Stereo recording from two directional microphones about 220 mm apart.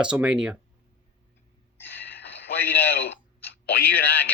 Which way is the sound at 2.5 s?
40° left (ahead or behind).